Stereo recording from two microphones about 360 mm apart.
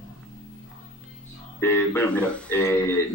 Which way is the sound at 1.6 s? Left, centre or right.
Centre.